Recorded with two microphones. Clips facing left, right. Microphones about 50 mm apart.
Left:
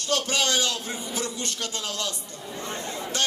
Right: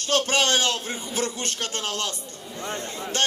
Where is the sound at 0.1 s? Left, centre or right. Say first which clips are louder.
Right 3 dB; right.